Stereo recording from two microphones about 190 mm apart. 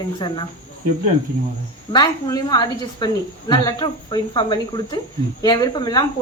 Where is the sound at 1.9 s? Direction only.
20° left (ahead or behind).